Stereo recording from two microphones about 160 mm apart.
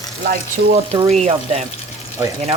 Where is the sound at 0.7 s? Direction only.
40° right (ahead or behind).